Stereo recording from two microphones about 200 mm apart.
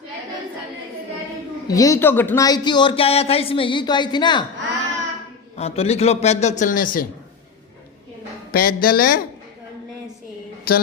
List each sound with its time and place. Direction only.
1.6 s speech: 15° left (ahead or behind)
5.5 s a man's voice: 30° left (ahead or behind)
8.5 s speech: 45° left (ahead or behind)
10.7 s a man's voice: 50° left (ahead or behind)